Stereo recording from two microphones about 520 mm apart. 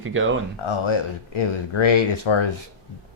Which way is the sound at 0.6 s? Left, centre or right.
Left.